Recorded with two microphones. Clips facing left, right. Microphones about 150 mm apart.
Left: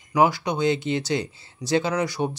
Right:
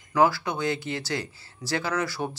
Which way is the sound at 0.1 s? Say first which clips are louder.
Left 2 dB; 20° left (ahead or behind).